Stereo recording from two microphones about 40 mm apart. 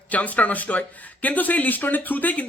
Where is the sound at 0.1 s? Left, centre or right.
Left.